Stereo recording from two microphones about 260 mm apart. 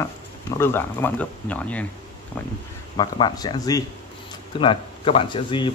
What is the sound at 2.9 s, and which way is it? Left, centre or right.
Speech, centre.